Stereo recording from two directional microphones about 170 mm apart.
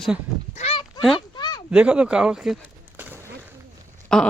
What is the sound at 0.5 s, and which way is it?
Goose, 35° left (ahead or behind).